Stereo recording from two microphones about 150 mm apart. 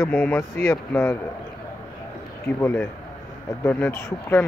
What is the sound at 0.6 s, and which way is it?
Speech, 20° left (ahead or behind).